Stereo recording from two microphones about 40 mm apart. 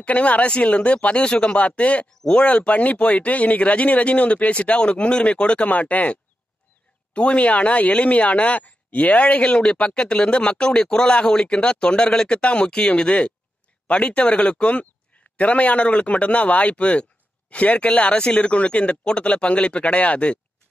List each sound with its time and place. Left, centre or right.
0.0 s speech: left
5.7 s speech: left
7.2 s speech: left
18.1 s speech: left